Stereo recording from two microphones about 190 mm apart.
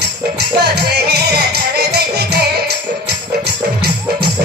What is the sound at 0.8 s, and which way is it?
Music, 60° right (ahead or behind).